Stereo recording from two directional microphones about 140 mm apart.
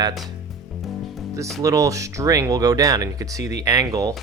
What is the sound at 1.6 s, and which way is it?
Speech, 25° right (ahead or behind).